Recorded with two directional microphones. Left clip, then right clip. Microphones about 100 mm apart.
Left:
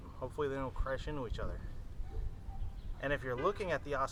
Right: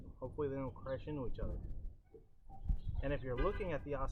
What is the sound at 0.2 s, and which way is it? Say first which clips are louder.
Speech: left 3 dB; 15° left (ahead or behind).